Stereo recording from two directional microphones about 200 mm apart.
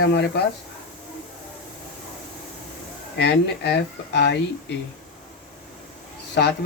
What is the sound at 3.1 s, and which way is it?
Speech, 55° left (ahead or behind).